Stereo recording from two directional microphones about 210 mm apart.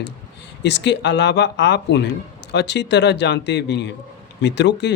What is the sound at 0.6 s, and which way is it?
Speech, 55° left (ahead or behind).